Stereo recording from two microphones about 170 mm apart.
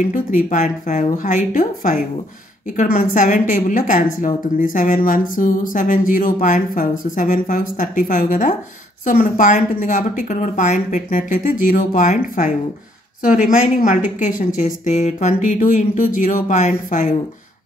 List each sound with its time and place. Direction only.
0.0 s speech: 50° left (ahead or behind)